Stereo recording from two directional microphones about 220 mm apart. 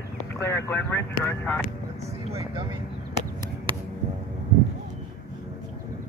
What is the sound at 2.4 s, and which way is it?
Speech, 15° right (ahead or behind).